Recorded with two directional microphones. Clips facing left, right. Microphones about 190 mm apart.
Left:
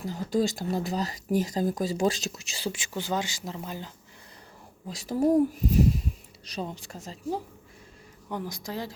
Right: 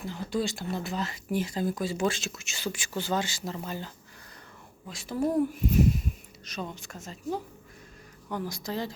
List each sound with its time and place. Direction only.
0.0 s speech: 40° left (ahead or behind); by 3.9 s 15° left (ahead or behind)
4.9 s speech: 35° left (ahead or behind)
8.3 s speech: 15° left (ahead or behind)